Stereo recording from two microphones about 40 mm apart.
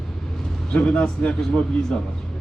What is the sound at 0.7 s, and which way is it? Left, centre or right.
Speech, left.